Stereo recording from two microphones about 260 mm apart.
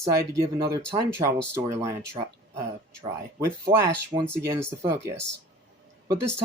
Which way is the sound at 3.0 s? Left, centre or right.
Centre.